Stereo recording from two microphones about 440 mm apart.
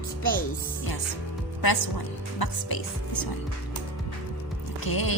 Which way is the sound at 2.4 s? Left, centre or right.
Left.